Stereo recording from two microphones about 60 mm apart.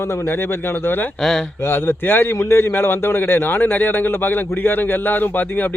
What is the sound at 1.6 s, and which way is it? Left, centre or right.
A man's voice, left.